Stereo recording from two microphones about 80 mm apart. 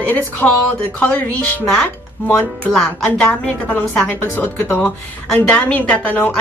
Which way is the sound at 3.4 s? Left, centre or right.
Centre.